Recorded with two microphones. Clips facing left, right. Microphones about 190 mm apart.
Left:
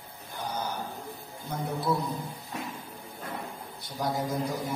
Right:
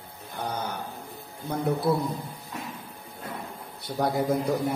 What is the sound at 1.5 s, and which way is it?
Speech, 60° right (ahead or behind).